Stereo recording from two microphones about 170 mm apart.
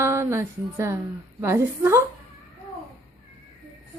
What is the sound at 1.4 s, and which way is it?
Speech, 15° right (ahead or behind).